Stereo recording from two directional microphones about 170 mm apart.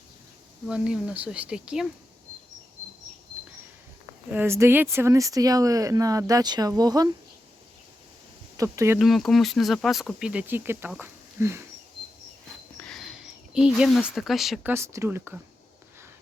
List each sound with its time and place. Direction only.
0.7 s speech: 5° right (ahead or behind)
4.3 s speech: 15° right (ahead or behind)
8.5 s speech: 20° right (ahead or behind)
9.0 s speech: centre (ahead or behind)
12.7 s a sound: 5° left (ahead or behind)
14.7 s speech: 15° right (ahead or behind)